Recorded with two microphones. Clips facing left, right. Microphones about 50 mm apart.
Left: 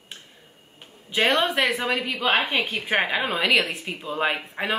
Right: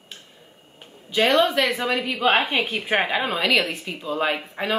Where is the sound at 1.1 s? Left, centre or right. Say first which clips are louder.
Right 3 dB; left.